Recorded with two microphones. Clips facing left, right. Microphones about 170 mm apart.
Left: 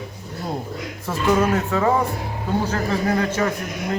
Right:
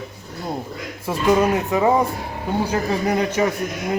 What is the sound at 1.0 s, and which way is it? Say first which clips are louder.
Speech: right 2 dB; 15° right (ahead or behind).